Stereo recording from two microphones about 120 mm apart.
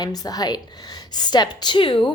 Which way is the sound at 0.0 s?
30° left (ahead or behind).